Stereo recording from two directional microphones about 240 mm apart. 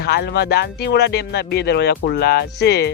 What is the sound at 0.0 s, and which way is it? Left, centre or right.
Speech, left.